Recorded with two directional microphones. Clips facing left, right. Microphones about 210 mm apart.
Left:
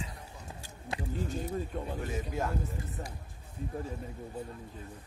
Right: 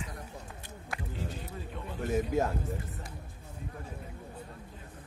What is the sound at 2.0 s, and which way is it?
Speech, 45° right (ahead or behind).